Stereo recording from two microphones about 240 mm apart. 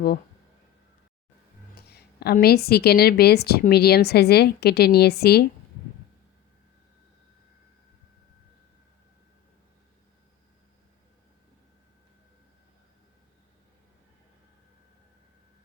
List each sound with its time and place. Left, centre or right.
1.7 s a woman's voice: left